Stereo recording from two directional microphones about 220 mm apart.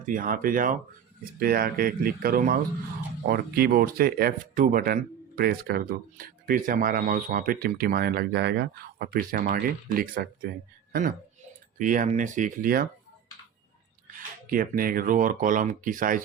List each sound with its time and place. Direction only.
0.0 s speech: 40° right (ahead or behind)
11.8 s speech: 35° right (ahead or behind)
14.5 s speech: 40° right (ahead or behind)